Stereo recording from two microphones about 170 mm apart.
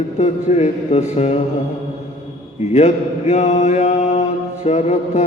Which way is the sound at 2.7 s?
40° left (ahead or behind).